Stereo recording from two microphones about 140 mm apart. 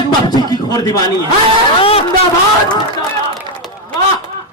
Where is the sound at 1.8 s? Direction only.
45° left (ahead or behind).